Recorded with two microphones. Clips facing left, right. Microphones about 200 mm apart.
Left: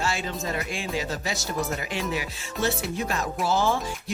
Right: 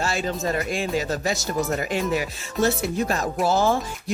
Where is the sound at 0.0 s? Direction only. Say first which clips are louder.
Right 4 dB; 40° right (ahead or behind).